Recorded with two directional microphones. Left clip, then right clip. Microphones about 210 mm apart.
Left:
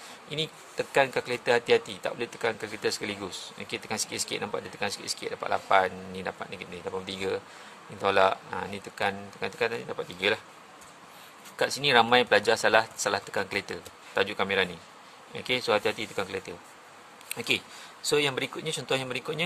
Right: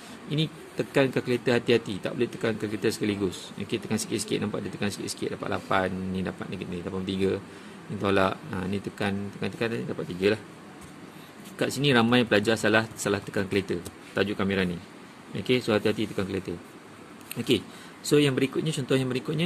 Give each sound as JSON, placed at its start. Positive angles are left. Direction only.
{"t": 0.3, "sound": "speech", "side_deg": 20}
{"t": 11.5, "sound": "speech", "side_deg": 20}
{"t": 18.0, "sound": "speech", "side_deg": 15}